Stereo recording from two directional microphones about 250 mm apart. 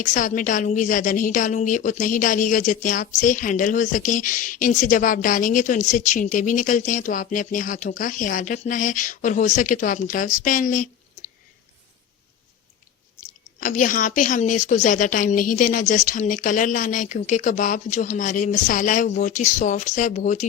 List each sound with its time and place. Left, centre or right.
0.0 s a woman's voice: left
13.6 s a woman's voice: left